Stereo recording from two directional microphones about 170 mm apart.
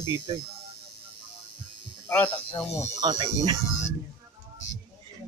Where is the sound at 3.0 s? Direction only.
25° right (ahead or behind).